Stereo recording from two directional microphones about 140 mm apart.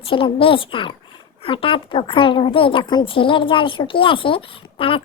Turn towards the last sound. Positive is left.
turn(degrees=40)  # may be behind; listen again after turning